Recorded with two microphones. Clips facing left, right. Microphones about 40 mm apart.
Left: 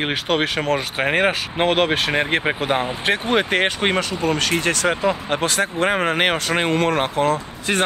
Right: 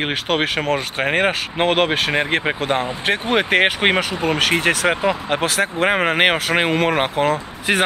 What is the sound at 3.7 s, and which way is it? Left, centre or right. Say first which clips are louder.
Speech: right 3 dB; right.